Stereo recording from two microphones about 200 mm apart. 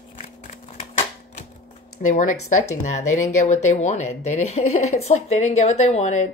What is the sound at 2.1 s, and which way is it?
Speech, 40° left (ahead or behind).